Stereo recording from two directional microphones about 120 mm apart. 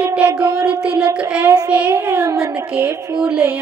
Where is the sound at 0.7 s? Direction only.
10° right (ahead or behind).